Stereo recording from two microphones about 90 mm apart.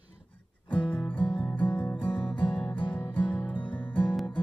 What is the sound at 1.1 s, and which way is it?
Music, 15° left (ahead or behind).